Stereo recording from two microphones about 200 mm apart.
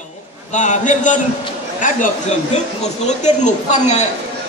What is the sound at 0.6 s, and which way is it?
Speech, 40° left (ahead or behind).